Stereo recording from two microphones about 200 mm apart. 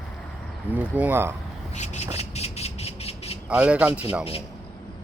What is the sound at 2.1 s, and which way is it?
Squeal, 30° left (ahead or behind).